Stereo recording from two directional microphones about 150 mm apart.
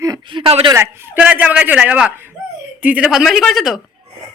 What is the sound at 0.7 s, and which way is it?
A woman's voice, 20° right (ahead or behind).